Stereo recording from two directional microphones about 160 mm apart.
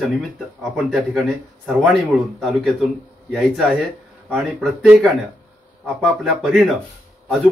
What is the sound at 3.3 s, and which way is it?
Speech, centre (ahead or behind).